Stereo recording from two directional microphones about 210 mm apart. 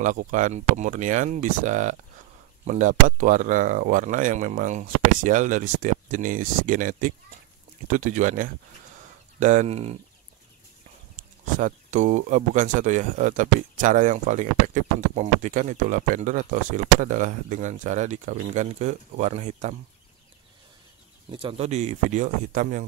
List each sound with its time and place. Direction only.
0.0 s speech: 35° right (ahead or behind)
11.5 s speech: 35° right (ahead or behind)
21.3 s speech: 25° right (ahead or behind)